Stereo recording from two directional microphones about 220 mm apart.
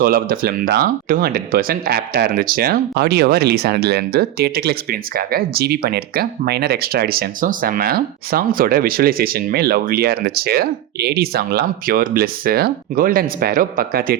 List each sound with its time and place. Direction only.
0.0 s speech: 45° right (ahead or behind)